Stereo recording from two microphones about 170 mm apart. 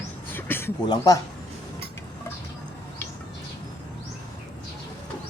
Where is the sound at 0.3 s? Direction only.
10° left (ahead or behind).